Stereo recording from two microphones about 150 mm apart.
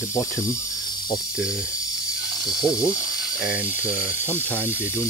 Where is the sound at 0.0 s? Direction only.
20° left (ahead or behind).